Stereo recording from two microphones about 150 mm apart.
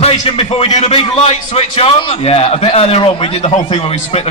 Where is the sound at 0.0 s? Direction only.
40° left (ahead or behind).